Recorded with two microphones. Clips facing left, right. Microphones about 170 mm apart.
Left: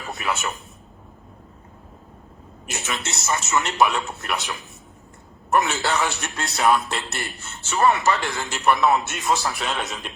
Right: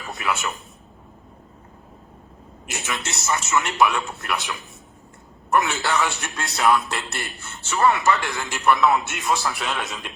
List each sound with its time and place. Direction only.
0.1 s a man's voice: 25° left (ahead or behind)
2.7 s a man's voice: 20° left (ahead or behind)